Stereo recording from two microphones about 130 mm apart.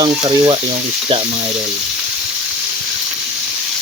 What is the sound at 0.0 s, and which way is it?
Frying, 35° right (ahead or behind).